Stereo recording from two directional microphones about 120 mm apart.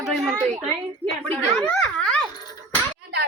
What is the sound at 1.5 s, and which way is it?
Speech, 5° left (ahead or behind).